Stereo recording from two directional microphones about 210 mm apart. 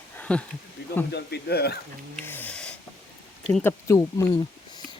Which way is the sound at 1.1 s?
50° left (ahead or behind).